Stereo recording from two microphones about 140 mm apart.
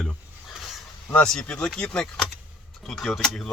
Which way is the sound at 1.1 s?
5° left (ahead or behind).